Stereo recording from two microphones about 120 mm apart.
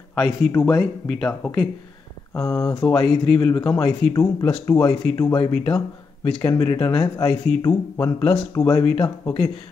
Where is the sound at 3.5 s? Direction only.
30° left (ahead or behind).